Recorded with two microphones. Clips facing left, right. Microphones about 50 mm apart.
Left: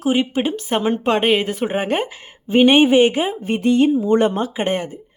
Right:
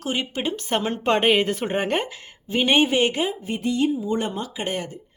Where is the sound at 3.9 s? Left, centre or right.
Left.